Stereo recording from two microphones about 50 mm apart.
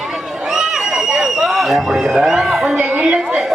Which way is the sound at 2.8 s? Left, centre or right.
Right.